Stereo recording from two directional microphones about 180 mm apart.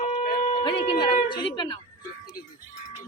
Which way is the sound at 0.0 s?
45° left (ahead or behind).